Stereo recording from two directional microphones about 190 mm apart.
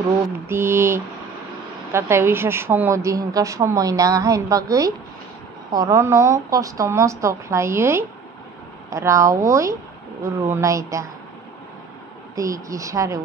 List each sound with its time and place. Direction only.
0.5 s a woman's voice: 15° right (ahead or behind)
12.4 s a woman's voice: 15° right (ahead or behind)